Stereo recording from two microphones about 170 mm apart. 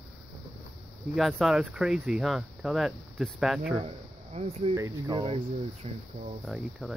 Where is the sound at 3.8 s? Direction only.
35° right (ahead or behind).